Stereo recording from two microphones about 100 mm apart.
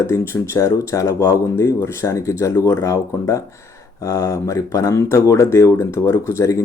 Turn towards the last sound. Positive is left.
turn(degrees=30)  # may be behind; listen again after turning